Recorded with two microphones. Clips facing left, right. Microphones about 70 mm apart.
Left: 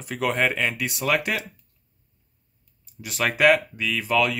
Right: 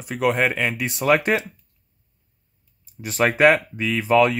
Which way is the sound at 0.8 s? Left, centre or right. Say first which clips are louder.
Right 5 dB; right.